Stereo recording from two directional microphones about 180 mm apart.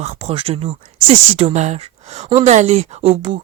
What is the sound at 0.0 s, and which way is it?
Speech, 35° right (ahead or behind).